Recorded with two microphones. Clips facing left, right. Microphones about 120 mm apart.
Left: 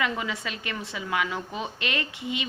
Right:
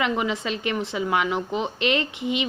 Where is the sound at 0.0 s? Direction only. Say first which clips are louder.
Right 5 dB; 25° right (ahead or behind).